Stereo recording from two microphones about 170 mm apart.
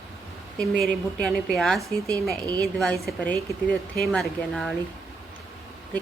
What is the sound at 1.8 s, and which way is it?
Speech, 20° right (ahead or behind).